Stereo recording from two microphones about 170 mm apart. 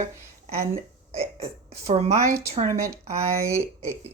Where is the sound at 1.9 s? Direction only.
40° right (ahead or behind).